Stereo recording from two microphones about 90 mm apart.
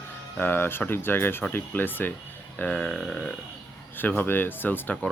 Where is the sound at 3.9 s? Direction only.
20° left (ahead or behind).